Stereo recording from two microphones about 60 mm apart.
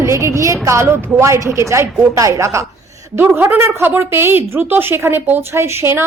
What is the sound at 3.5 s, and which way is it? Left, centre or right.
A woman's voice, right.